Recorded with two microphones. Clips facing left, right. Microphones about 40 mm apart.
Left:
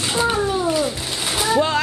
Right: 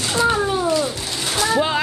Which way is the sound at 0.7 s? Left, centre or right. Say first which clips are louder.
Even; centre.